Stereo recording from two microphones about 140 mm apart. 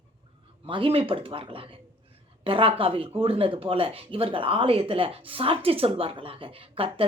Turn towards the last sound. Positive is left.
turn(degrees=-40)  # may be behind; listen again after turning